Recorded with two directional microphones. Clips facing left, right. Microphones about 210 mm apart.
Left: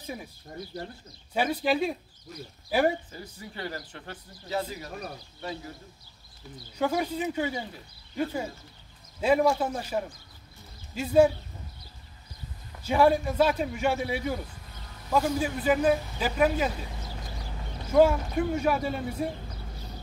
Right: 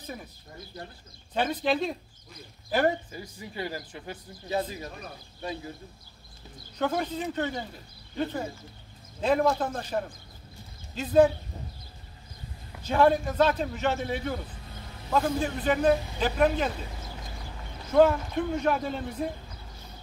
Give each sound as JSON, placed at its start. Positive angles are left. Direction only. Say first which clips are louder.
{"t": 0.0, "sound": "speech", "louder": "left 2 dB", "side_deg": 10}
{"t": 1.3, "sound": "speech", "louder": "left 1 dB", "side_deg": 10}
{"t": 3.1, "sound": "speech", "louder": "right 1 dB", "side_deg": -10}
{"t": 6.8, "sound": "speech", "louder": "left 1 dB", "side_deg": 10}
{"t": 12.8, "sound": "speech", "louder": "even", "side_deg": 10}
{"t": 17.9, "sound": "speech", "louder": "even", "side_deg": 10}